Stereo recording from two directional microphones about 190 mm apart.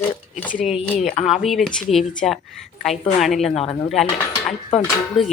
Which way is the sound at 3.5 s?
30° left (ahead or behind).